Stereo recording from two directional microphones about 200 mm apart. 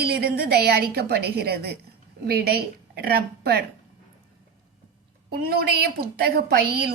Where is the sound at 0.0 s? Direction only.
50° right (ahead or behind).